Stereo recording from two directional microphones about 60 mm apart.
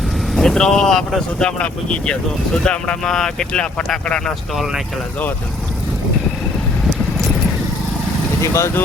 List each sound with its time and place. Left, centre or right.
0.3 s speech: centre
4.5 s speech: centre
8.4 s speech: left